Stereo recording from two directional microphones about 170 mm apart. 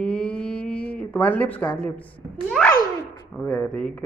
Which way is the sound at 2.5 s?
5° left (ahead or behind).